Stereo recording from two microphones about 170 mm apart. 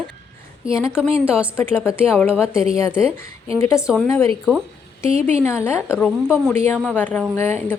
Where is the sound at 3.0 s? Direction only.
35° right (ahead or behind).